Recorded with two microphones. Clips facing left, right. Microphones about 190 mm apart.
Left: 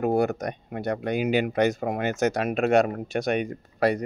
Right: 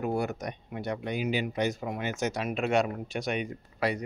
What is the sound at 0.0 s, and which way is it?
Speech, 60° left (ahead or behind).